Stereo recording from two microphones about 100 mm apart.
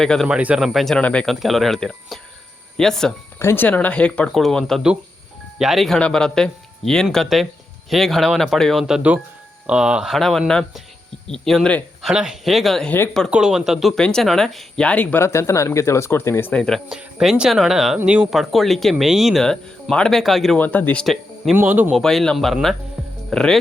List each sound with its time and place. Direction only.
0.0 s speech: 5° left (ahead or behind)
0.3 s speech: 10° right (ahead or behind); by 1.3 s 10° left (ahead or behind)
1.3 s speech: centre (ahead or behind)
3.3 s speech: 25° left (ahead or behind)
16.5 s speech: 10° left (ahead or behind)
16.9 s speech: 5° right (ahead or behind)
20.6 s speech: 15° left (ahead or behind)
21.0 s speech: centre (ahead or behind)
21.5 s speech: 20° right (ahead or behind)
21.9 s speech: 5° left (ahead or behind)